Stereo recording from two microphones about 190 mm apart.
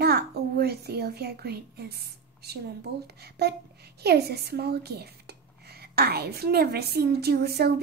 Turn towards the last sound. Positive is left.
turn(degrees=-55)  # may be behind; listen again after turning